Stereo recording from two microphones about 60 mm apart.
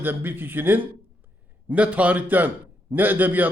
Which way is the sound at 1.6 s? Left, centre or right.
Right.